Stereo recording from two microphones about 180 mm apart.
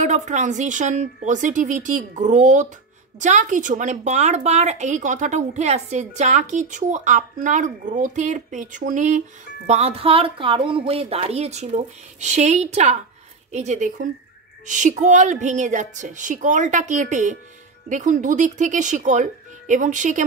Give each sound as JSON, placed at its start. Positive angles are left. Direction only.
{"t": 0.0, "sound": "a woman's voice", "side_deg": -40}